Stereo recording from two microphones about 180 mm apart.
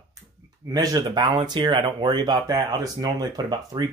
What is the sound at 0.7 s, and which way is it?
Speech, 20° right (ahead or behind).